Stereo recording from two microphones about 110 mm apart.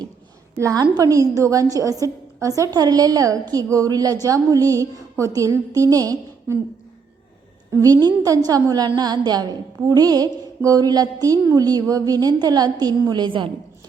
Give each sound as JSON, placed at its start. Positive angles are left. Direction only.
{"t": 0.6, "sound": "a woman's voice", "side_deg": -35}
{"t": 7.7, "sound": "a woman's voice", "side_deg": -30}